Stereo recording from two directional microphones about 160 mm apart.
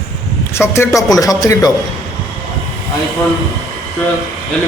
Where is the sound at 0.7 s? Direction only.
15° left (ahead or behind).